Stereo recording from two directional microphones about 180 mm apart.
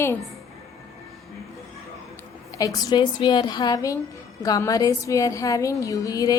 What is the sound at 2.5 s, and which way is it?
A woman's voice, 20° left (ahead or behind).